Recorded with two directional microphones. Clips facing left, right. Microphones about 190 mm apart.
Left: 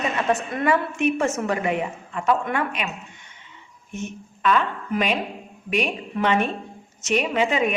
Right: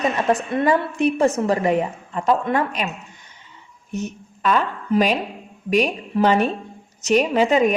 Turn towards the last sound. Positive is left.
turn(degrees=-40)  # may be behind; listen again after turning